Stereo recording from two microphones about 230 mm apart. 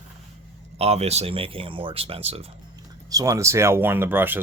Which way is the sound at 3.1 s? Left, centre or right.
Centre.